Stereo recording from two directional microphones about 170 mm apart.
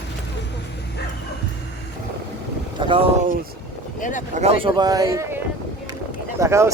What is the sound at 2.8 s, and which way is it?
Speech, 30° right (ahead or behind).